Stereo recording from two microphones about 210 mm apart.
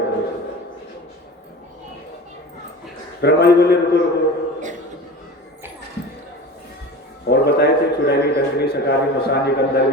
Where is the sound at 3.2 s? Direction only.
50° left (ahead or behind).